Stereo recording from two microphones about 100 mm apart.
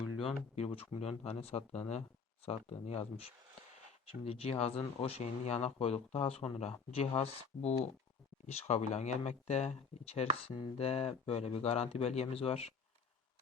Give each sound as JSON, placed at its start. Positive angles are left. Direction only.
{"t": 0.5, "sound": "speech", "side_deg": 80}
{"t": 4.0, "sound": "speech", "side_deg": 70}